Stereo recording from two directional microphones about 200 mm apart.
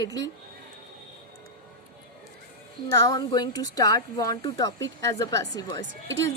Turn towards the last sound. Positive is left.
turn(degrees=15)  # may be behind; listen again after turning